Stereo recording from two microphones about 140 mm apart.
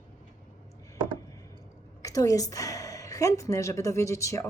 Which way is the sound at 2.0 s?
25° left (ahead or behind).